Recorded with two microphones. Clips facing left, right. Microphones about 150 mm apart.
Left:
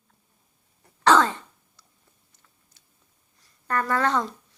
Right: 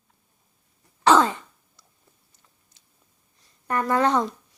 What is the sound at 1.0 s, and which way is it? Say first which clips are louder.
Throat clearing: right 1 dB; 10° right (ahead or behind).